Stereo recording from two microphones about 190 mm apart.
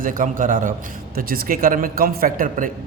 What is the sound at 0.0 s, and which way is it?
Speech, 45° right (ahead or behind).